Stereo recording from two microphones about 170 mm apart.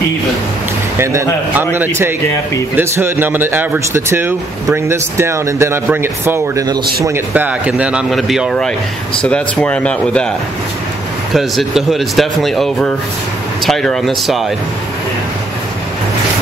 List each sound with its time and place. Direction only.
0.9 s speech: 15° right (ahead or behind); by 10.2 s 5° left (ahead or behind)
11.3 s speech: centre (ahead or behind)